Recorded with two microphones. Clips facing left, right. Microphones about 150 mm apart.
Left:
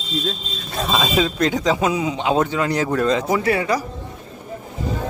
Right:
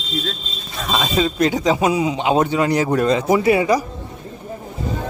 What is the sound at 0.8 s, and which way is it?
Speech, centre (ahead or behind).